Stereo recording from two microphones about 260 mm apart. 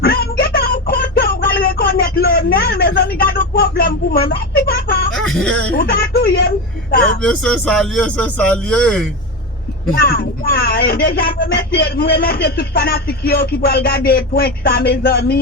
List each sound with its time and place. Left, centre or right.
0.0 s a sound: left
5.3 s speech: centre
5.7 s speech: left
7.2 s a man's voice: centre
9.9 s speech: left